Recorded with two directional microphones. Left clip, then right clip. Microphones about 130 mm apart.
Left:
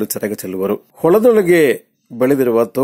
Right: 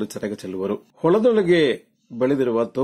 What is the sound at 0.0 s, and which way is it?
Speech, 35° left (ahead or behind).